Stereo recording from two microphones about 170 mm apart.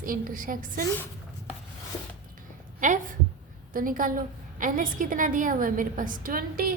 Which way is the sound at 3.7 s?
55° right (ahead or behind).